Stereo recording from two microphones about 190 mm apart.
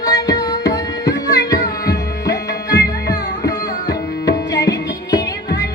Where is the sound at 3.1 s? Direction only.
20° left (ahead or behind).